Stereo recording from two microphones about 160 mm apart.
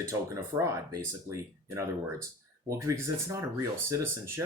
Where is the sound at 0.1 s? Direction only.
20° right (ahead or behind).